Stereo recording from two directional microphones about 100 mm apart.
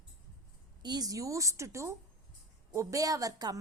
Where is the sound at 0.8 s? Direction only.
45° right (ahead or behind).